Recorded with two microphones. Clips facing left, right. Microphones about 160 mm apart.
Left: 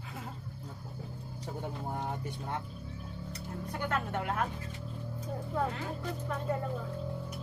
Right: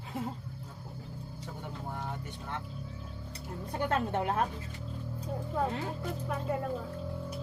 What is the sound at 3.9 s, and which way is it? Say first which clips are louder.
Speech: right 4 dB; 30° right (ahead or behind).